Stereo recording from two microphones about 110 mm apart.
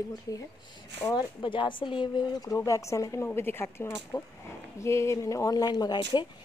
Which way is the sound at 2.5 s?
30° left (ahead or behind).